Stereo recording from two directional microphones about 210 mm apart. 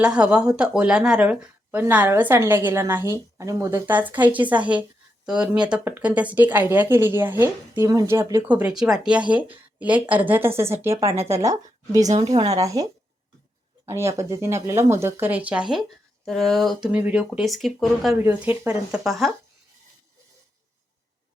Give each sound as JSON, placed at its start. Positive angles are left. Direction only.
{"t": 0.0, "sound": "a woman's voice", "side_deg": -5}
{"t": 12.0, "sound": "speech", "side_deg": -30}
{"t": 12.5, "sound": "a woman's voice", "side_deg": -15}